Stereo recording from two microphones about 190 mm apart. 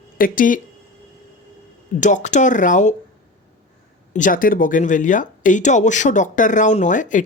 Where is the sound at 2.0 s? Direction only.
40° left (ahead or behind).